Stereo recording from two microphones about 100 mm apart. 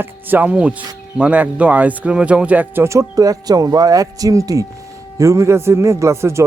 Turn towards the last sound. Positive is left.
turn(degrees=-30)  # may be behind; listen again after turning